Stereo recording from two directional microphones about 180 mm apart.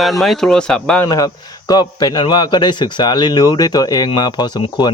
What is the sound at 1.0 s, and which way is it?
A man's voice, 20° left (ahead or behind).